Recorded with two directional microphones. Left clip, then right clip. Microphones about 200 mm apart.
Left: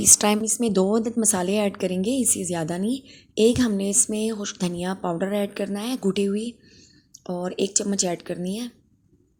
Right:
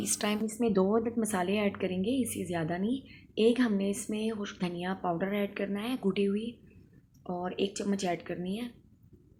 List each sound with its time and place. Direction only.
0.0 s a woman's voice: 50° left (ahead or behind)
0.4 s a woman's voice: 30° left (ahead or behind)